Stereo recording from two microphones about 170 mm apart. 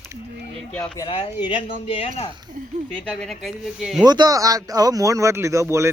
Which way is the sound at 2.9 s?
5° left (ahead or behind).